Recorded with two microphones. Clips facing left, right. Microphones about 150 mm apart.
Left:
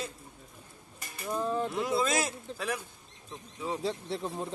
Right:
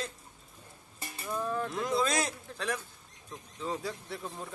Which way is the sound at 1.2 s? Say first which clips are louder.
Left 3 dB; 25° left (ahead or behind).